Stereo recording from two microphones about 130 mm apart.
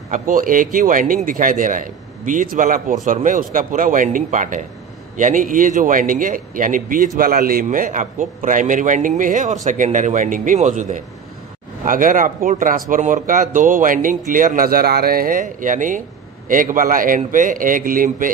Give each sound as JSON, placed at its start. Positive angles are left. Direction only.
{"t": 0.1, "sound": "a man's voice", "side_deg": -90}
{"t": 9.8, "sound": "a man's voice", "side_deg": -70}
{"t": 11.8, "sound": "a man's voice", "side_deg": -90}